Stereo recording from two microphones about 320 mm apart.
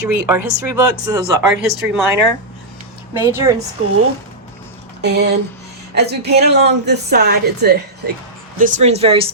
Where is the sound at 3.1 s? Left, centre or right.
Centre.